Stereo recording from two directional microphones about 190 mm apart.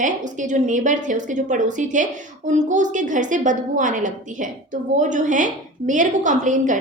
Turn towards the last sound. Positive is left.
turn(degrees=-40)  # may be behind; listen again after turning